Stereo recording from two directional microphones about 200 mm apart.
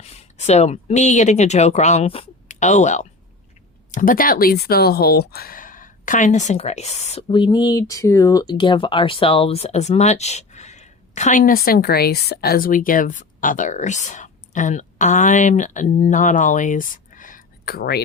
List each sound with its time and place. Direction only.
0.0 s speech: 30° left (ahead or behind); by 18.0 s 50° left (ahead or behind)